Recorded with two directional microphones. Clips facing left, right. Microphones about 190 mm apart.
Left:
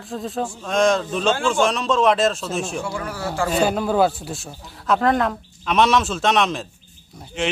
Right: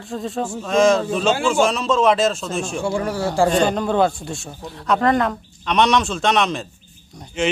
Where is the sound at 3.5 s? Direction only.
5° left (ahead or behind).